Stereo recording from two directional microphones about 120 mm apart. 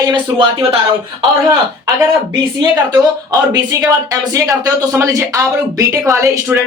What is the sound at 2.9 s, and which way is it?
A woman's voice, 30° right (ahead or behind).